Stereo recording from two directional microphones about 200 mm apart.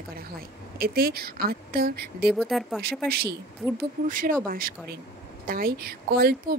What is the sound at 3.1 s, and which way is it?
A woman's voice, 50° right (ahead or behind).